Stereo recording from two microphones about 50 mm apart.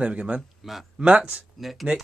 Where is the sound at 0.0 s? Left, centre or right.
Right.